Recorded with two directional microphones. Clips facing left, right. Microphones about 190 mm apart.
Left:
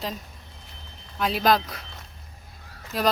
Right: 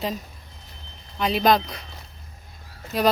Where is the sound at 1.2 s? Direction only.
Centre (ahead or behind).